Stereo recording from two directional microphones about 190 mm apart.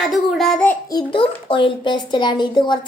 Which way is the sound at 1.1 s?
25° left (ahead or behind).